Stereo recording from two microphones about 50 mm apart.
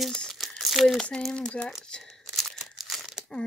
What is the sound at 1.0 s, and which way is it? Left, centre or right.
Speech, left.